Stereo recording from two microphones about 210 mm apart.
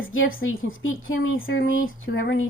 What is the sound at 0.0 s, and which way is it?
A woman's voice, 70° left (ahead or behind).